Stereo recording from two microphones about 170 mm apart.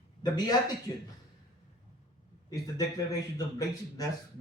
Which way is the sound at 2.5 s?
20° left (ahead or behind).